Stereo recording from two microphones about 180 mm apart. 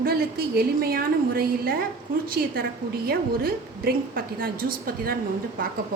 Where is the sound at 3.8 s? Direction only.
55° right (ahead or behind).